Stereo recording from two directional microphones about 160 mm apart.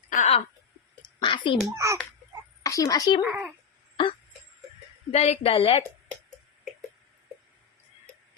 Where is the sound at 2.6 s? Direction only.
20° left (ahead or behind).